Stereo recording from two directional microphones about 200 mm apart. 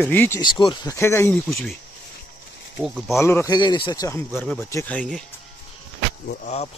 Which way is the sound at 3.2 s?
15° left (ahead or behind).